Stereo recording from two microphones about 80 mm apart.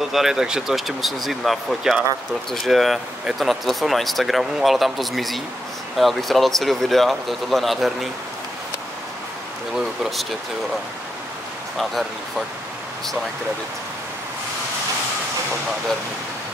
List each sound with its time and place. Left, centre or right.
0.1 s speech: centre
11.8 s speech: centre